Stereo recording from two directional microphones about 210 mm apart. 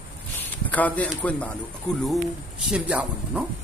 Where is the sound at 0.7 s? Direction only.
5° left (ahead or behind).